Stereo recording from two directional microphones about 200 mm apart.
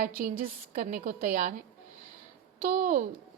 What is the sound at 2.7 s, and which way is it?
Speech, 40° right (ahead or behind).